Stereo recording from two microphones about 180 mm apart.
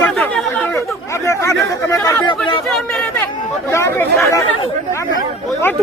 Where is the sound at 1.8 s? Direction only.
15° left (ahead or behind).